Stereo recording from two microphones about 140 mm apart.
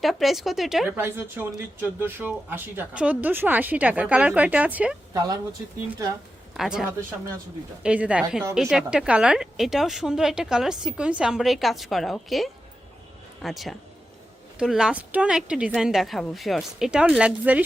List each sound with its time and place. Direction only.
0.0 s a woman's voice: centre (ahead or behind)
0.9 s speech: 15° right (ahead or behind)
5.1 s speech: 25° right (ahead or behind)
6.6 s a woman's voice: 5° right (ahead or behind)